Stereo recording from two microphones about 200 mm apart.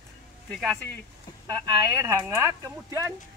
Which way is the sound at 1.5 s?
15° right (ahead or behind).